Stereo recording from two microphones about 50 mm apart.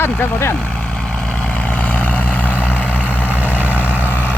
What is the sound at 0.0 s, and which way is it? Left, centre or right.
Speech, left.